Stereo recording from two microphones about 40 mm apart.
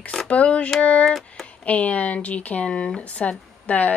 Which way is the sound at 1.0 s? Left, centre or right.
Centre.